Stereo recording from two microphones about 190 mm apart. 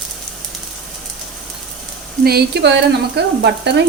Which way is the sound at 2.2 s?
60° right (ahead or behind).